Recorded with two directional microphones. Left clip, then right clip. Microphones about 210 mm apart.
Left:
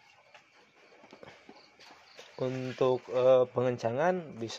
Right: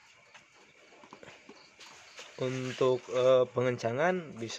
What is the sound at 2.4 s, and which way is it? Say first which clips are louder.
Speech: even; centre (ahead or behind).